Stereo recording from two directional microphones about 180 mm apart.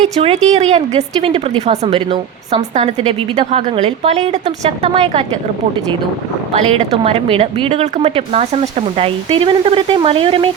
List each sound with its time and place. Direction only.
0.0 s speech: 35° right (ahead or behind)
6.5 s speech: 35° right (ahead or behind)